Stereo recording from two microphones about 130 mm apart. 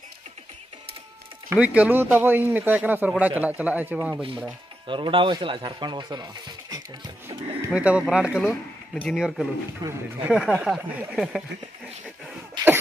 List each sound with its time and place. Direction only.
1.6 s speech: 10° right (ahead or behind)
4.8 s speech: 40° right (ahead or behind)
7.2 s speech: 10° right (ahead or behind)
8.5 s speech: 15° left (ahead or behind)
9.1 s speech: 5° right (ahead or behind)
9.8 s speech: 30° right (ahead or behind)
10.2 s speech: 5° right (ahead or behind)
12.6 s cough: 35° right (ahead or behind)